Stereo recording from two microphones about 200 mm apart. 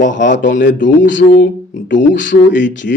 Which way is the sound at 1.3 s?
40° left (ahead or behind).